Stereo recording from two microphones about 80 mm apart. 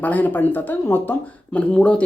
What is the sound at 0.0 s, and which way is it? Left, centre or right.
Speech, left.